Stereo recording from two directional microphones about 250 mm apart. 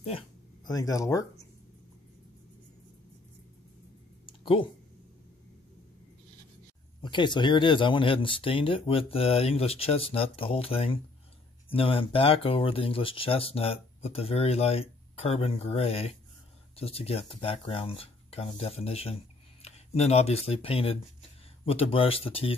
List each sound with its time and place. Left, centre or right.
0.7 s speech: centre
4.3 s a sound: centre
7.0 s speech: centre